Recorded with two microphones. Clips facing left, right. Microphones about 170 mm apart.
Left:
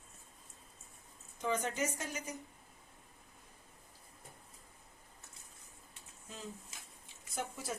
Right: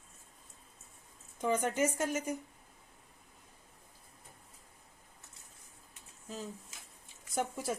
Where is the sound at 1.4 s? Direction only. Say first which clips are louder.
Right 5 dB; 50° right (ahead or behind).